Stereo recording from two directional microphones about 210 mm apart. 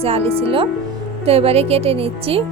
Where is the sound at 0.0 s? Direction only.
30° right (ahead or behind).